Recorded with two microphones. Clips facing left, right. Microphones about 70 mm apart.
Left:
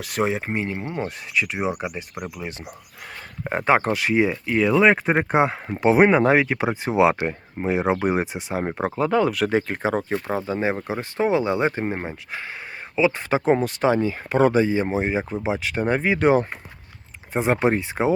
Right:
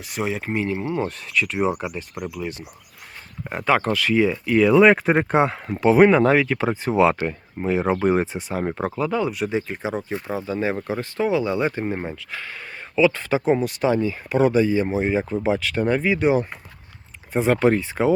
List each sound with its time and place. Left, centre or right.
0.2 s speech: left
0.8 s speech: centre
2.3 s speech: left
3.8 s speech: left
4.5 s speech: centre
5.7 s speech: centre
9.0 s speech: left
15.1 s speech: centre
16.1 s speech: left
17.3 s speech: left